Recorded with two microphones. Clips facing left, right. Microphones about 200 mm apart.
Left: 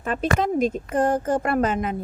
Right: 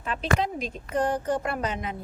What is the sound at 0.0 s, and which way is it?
A woman's voice, 50° left (ahead or behind).